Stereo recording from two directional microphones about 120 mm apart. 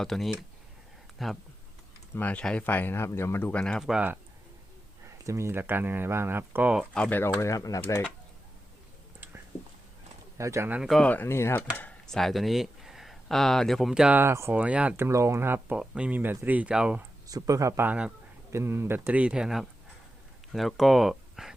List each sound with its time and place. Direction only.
0.0 s speech: centre (ahead or behind)
2.1 s speech: 10° left (ahead or behind)
3.6 s speech: 5° left (ahead or behind)
5.0 s speech: 25° right (ahead or behind); by 6.8 s 10° right (ahead or behind)
6.9 s speech: 10° left (ahead or behind)
10.3 s speech: 25° right (ahead or behind)
10.8 s speech: centre (ahead or behind)
11.1 s speech: 20° left (ahead or behind)
11.8 s speech: 10° left (ahead or behind)
14.2 s speech: 20° right (ahead or behind)
14.6 s speech: 10° right (ahead or behind)
17.2 s speech: 30° right (ahead or behind)
17.8 s speech: 10° right (ahead or behind)
18.5 s speech: 20° right (ahead or behind); by 21.5 s centre (ahead or behind)